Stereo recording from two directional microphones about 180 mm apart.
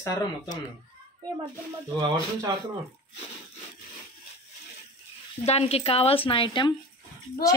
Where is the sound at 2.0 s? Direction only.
20° right (ahead or behind).